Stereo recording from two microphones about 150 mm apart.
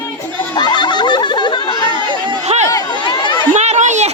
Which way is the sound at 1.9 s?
30° right (ahead or behind).